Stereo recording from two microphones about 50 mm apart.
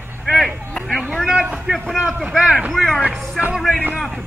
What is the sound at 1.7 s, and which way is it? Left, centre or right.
A man's voice, right.